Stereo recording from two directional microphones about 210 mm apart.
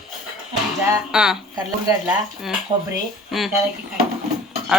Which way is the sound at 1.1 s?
5° right (ahead or behind).